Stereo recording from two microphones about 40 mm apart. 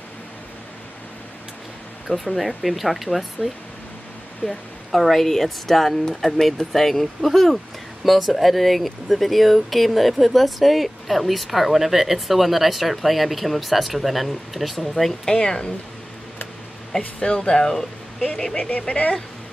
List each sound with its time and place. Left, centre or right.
2.0 s speech: centre
15.2 s speech: centre
17.0 s speech: left
18.6 s speech: left